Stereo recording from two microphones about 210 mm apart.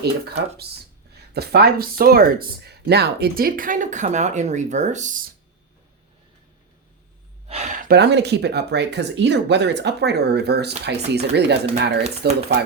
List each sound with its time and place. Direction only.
0.0 s speech: 50° right (ahead or behind)
7.4 s speech: 30° right (ahead or behind); by 12.6 s 50° right (ahead or behind)